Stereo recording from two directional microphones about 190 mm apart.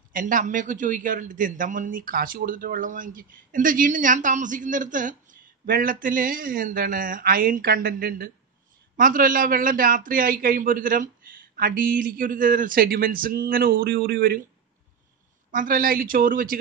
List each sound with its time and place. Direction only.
0.1 s a man's voice: 45° right (ahead or behind)
15.5 s a man's voice: 45° right (ahead or behind)